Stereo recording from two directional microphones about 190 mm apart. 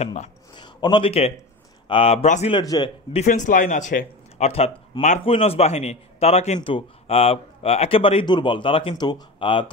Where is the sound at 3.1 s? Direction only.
40° left (ahead or behind).